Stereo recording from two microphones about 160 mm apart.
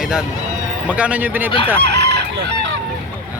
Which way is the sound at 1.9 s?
90° right.